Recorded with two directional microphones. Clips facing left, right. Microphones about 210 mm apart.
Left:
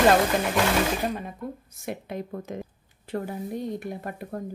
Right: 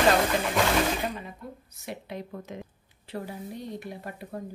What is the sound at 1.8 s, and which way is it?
A woman's voice, 50° left (ahead or behind).